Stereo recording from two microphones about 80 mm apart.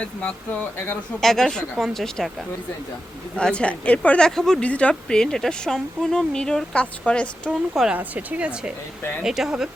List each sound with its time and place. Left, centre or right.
0.0 s speech: centre
1.2 s speech: centre
3.3 s speech: centre
4.3 s speech: centre
4.6 s speech: centre
7.9 s speech: right; by 9.6 s centre